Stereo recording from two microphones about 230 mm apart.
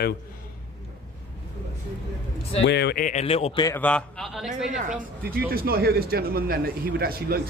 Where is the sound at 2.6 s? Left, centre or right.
Left; by 3.8 s centre.